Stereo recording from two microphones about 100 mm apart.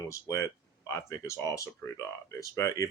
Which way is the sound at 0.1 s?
30° left (ahead or behind).